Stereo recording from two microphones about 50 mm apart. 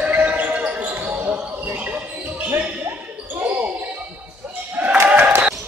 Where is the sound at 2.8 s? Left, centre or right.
Right.